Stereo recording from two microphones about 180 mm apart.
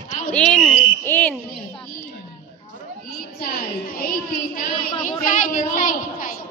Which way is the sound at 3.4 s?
55° left (ahead or behind).